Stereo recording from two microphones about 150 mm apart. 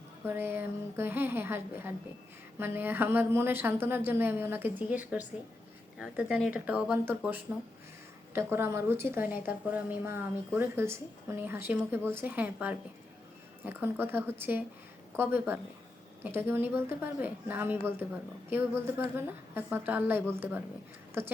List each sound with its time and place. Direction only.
0.3 s a woman's voice: 15° right (ahead or behind)